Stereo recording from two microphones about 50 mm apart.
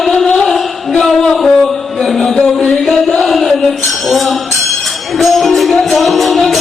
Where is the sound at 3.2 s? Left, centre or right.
Centre.